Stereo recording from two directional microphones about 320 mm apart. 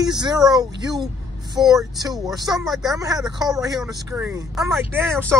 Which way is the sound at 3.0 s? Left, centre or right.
Centre.